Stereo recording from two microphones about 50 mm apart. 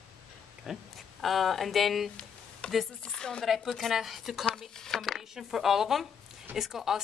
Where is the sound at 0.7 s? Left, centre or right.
Centre.